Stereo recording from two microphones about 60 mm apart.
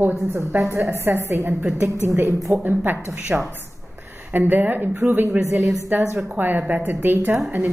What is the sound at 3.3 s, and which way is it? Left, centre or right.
Speech, right.